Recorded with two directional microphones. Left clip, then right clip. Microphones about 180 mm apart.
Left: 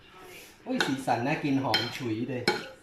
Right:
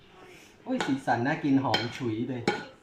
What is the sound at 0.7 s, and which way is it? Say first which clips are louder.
Dishes: even; 5° left (ahead or behind).